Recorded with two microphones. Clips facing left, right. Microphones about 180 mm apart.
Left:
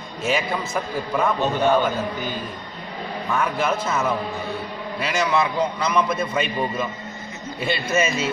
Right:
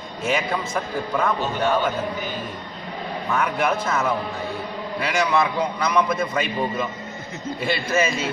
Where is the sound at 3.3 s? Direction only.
Centre (ahead or behind).